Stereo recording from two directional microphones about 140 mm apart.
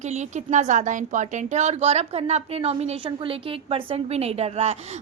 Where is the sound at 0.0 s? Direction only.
55° right (ahead or behind).